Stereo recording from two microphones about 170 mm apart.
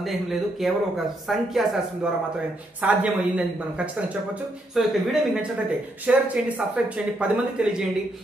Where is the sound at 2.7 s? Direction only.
10° right (ahead or behind).